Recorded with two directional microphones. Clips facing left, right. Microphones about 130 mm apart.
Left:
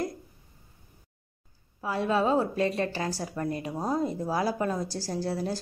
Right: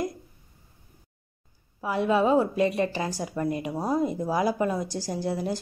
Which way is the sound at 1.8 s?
15° right (ahead or behind).